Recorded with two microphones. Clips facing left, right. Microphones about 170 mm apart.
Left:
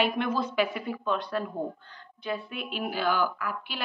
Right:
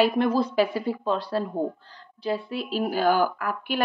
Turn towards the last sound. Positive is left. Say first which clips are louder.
# right 8 dB
turn(degrees=-50)  # may be behind; listen again after turning